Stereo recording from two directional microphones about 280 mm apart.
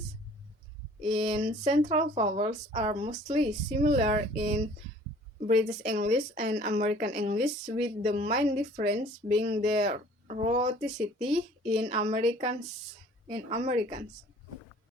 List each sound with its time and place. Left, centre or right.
1.0 s speech: centre
4.4 s speech: right
5.8 s speech: right
10.8 s speech: centre
11.6 s speech: centre